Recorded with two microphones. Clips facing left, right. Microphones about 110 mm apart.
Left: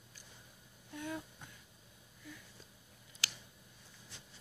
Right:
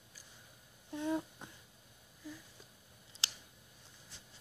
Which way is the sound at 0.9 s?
30° right (ahead or behind).